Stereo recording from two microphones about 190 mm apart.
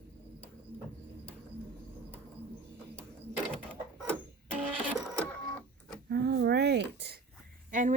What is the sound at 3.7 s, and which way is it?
Printer, 5° left (ahead or behind).